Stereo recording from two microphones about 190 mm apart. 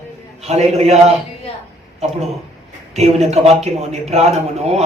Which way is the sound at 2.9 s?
35° right (ahead or behind).